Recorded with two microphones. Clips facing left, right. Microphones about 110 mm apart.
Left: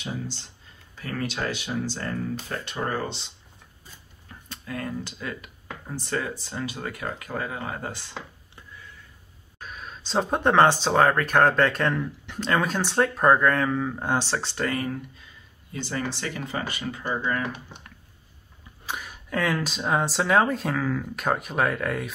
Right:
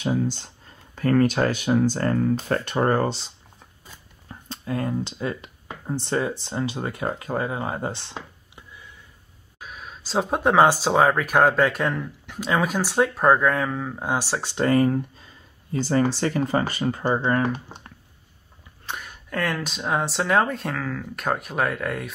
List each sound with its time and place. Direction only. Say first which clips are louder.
0.0 s speech: right 10 dB; 50° right (ahead or behind)
4.3 s speech: right 6 dB; 30° right (ahead or behind)
9.6 s speech: even; 5° right (ahead or behind)
14.6 s speech: right 12 dB; 35° right (ahead or behind)
18.9 s speech: even; centre (ahead or behind)